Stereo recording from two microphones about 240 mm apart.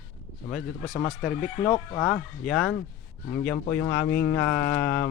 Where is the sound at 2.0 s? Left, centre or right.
Centre.